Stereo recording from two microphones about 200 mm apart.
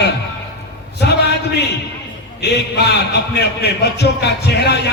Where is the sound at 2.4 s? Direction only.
55° left (ahead or behind).